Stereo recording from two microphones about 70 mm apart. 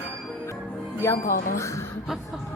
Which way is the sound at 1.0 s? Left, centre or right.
Left.